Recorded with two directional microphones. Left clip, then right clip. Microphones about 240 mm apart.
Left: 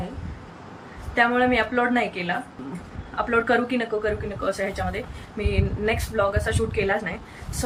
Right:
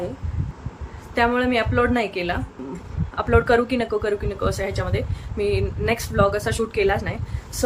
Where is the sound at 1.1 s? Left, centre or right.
Centre.